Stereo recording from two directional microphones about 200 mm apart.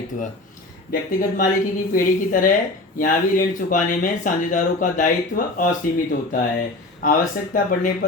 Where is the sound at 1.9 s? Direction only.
45° left (ahead or behind).